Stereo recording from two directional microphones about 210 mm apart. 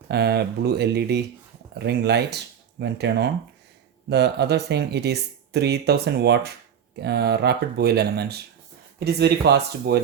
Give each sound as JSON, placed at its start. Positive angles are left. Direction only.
{"t": 0.1, "sound": "speech", "side_deg": -50}